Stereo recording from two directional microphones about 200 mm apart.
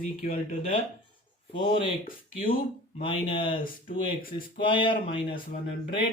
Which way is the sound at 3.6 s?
45° left (ahead or behind).